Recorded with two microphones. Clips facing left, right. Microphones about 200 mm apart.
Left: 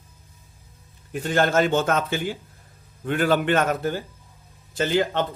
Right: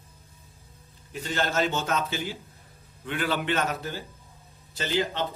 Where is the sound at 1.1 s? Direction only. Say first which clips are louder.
Left 7 dB; 50° left (ahead or behind).